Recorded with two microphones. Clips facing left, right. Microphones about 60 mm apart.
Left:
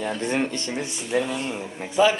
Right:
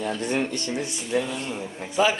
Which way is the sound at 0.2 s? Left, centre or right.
Left.